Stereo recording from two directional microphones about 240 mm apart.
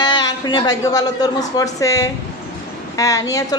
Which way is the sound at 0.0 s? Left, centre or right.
Centre.